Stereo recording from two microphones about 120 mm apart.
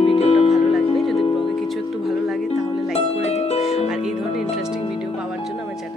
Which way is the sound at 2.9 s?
55° left (ahead or behind).